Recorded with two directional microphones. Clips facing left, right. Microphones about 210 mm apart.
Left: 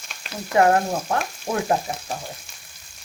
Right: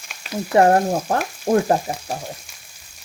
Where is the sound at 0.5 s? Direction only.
35° right (ahead or behind).